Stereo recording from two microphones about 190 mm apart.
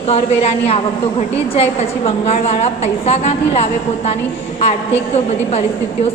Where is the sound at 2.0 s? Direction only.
35° left (ahead or behind).